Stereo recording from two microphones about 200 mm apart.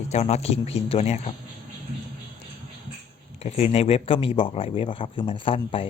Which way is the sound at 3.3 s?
30° left (ahead or behind).